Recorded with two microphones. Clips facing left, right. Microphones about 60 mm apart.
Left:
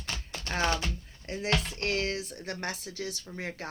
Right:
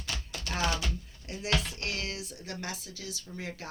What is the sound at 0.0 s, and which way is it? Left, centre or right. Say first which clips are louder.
Typewriter: even; left.